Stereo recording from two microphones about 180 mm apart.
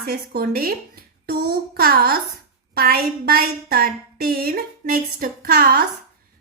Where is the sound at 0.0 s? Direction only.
55° right (ahead or behind).